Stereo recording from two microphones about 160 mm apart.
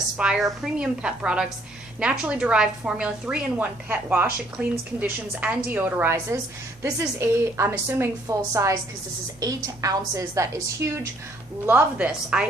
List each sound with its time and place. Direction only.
0.2 s a woman's voice: 5° right (ahead or behind)